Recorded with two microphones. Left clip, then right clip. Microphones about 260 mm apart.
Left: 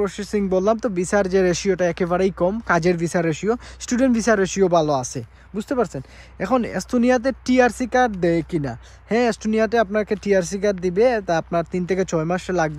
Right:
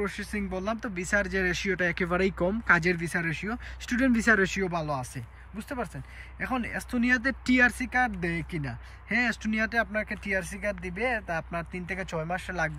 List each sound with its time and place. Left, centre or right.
0.0 s speech: centre